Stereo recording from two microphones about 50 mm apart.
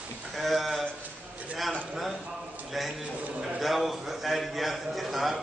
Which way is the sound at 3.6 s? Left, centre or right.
Centre.